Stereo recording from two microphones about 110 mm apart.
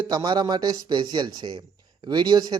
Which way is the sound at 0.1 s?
40° right (ahead or behind).